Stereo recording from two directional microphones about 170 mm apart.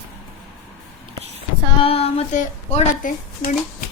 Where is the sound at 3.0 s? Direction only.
50° left (ahead or behind).